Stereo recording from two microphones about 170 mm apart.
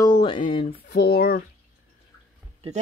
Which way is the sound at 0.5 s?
30° left (ahead or behind).